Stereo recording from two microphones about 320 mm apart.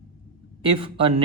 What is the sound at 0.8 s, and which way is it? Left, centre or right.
Speech, centre.